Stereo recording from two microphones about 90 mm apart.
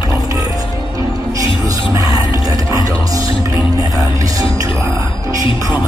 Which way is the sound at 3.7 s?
40° right (ahead or behind).